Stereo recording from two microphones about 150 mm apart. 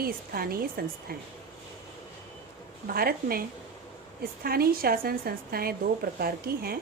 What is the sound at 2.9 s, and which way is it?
A woman's voice, 85° right.